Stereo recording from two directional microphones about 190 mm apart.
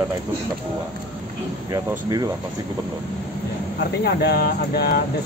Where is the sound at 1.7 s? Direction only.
20° right (ahead or behind).